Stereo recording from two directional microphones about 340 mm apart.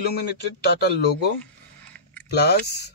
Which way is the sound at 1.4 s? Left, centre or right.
Centre.